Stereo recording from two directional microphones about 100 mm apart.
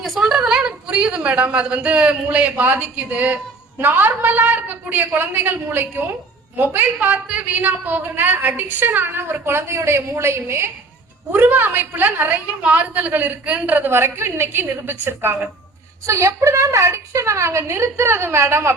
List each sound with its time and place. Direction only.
0.0 s a woman's voice: 5° right (ahead or behind); by 18.7 s 25° right (ahead or behind)